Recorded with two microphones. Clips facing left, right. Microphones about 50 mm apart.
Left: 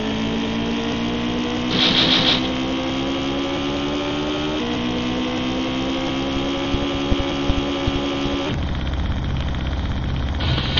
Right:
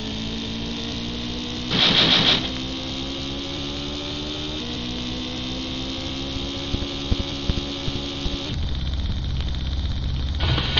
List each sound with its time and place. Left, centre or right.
0.0 s vehicle: left
1.7 s music: centre
2.4 s vehicle: left